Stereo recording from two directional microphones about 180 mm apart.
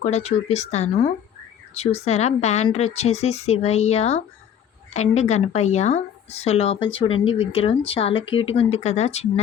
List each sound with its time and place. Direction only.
0.0 s speech: 35° left (ahead or behind)